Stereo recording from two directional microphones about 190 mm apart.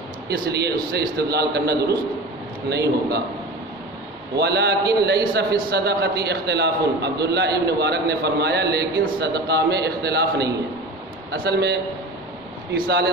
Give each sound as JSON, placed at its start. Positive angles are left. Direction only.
{"t": 0.5, "sound": "a man's voice", "side_deg": -60}
{"t": 4.4, "sound": "a man's voice", "side_deg": -60}
{"t": 12.8, "sound": "a man's voice", "side_deg": -55}